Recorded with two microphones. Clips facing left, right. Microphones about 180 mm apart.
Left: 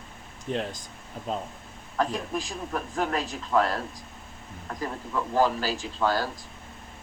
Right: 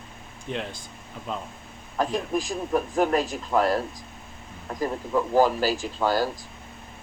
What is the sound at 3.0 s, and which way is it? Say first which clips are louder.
Speech: right 4 dB; 40° right (ahead or behind).